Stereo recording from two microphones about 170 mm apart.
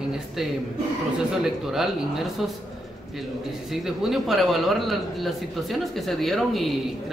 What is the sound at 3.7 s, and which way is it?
A man's voice, centre (ahead or behind).